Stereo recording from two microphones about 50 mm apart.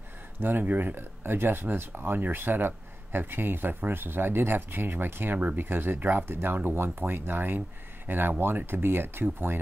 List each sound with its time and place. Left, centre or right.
0.4 s speech: right
6.7 s speech: right